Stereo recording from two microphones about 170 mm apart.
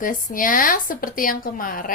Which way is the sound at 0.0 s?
55° left (ahead or behind).